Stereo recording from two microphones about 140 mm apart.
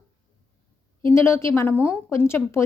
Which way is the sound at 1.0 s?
20° left (ahead or behind).